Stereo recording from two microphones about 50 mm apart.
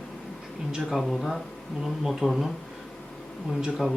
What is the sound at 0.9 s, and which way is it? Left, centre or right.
Speech, centre.